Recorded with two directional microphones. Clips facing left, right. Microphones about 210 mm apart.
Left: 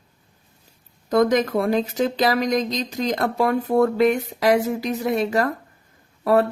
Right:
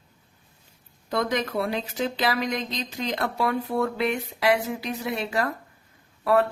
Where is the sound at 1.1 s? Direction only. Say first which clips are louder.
Left 8 dB; 45° left (ahead or behind).